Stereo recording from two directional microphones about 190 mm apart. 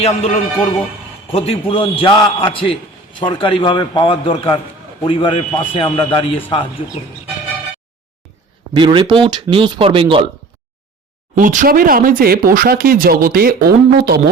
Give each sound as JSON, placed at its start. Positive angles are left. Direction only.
{"t": 0.0, "sound": "music", "side_deg": 30}
{"t": 1.3, "sound": "a man's voice", "side_deg": 30}
{"t": 8.7, "sound": "speech", "side_deg": -25}
{"t": 11.3, "sound": "speech", "side_deg": -45}